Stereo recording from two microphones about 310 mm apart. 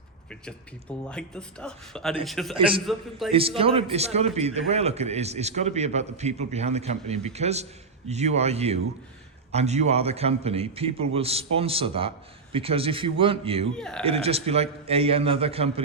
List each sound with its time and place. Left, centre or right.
0.3 s speech: centre
3.3 s a man's voice: centre
13.7 s speech: centre
14.0 s a man's voice: centre